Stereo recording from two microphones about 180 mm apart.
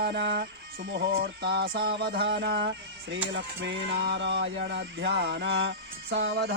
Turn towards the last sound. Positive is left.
turn(degrees=-70)  # may be behind; listen again after turning